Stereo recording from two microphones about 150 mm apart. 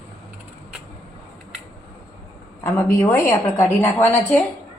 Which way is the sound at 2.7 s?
15° left (ahead or behind).